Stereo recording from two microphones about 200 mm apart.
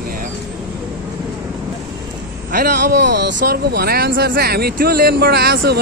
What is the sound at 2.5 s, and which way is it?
A man's voice, 50° right (ahead or behind).